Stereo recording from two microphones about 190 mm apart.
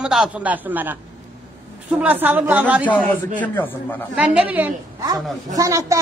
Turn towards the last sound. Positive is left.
turn(degrees=-15)  # may be behind; listen again after turning